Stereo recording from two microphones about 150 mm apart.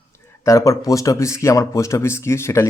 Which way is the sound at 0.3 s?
20° left (ahead or behind).